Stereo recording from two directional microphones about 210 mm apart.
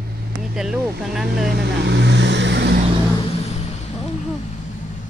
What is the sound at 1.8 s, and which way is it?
Vehicle, 55° right (ahead or behind).